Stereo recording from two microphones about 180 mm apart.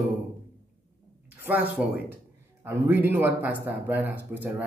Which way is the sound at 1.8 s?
5° right (ahead or behind).